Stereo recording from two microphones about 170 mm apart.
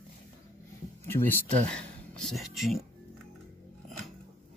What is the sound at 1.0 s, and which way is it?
Speech, 15° left (ahead or behind).